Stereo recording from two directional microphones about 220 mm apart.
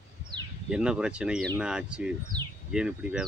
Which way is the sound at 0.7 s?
5° right (ahead or behind).